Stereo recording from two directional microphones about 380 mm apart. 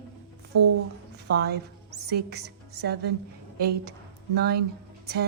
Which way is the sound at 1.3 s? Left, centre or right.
Right.